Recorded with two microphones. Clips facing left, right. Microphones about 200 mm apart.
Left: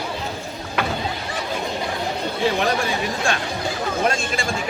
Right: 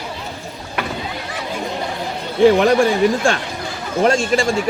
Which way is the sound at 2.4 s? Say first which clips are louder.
Right 10 dB; 50° right (ahead or behind).